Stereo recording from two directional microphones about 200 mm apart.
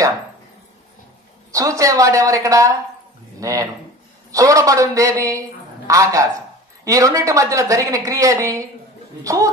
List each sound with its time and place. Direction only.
1.5 s speech: 15° right (ahead or behind)